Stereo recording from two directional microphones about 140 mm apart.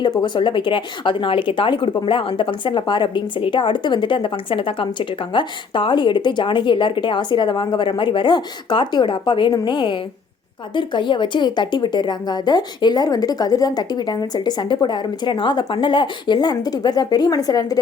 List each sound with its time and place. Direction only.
0.2 s a woman's voice: 35° left (ahead or behind)